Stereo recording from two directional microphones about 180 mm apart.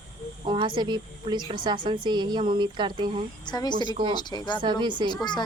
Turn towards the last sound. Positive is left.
turn(degrees=-25)  # may be behind; listen again after turning